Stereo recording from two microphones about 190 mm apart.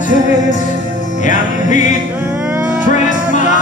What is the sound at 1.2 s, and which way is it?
Music, 40° left (ahead or behind).